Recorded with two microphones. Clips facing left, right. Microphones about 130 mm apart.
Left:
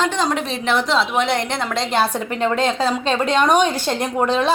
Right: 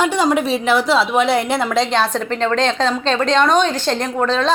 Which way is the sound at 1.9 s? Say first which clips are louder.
Right 1 dB; 10° left (ahead or behind).